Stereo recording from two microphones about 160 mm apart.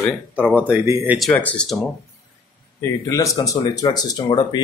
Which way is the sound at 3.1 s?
20° left (ahead or behind).